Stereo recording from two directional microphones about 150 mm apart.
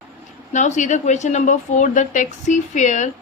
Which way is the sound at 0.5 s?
55° left (ahead or behind).